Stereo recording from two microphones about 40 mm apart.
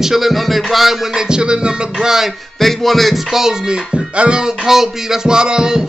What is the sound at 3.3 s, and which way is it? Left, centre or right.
Music, centre.